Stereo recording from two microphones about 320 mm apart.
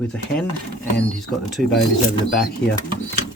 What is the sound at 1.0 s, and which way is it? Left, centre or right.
Speech, centre.